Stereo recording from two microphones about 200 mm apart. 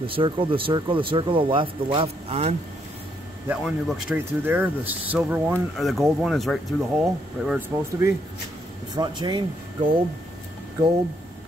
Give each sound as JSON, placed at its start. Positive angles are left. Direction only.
{"t": 0.0, "sound": "speech", "side_deg": -25}
{"t": 3.4, "sound": "speech", "side_deg": -5}
{"t": 8.9, "sound": "speech", "side_deg": -20}